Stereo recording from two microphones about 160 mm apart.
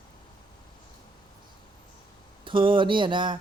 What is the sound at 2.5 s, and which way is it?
Speech, 30° right (ahead or behind).